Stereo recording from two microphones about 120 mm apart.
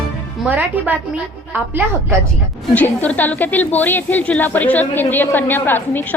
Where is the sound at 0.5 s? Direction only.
15° right (ahead or behind).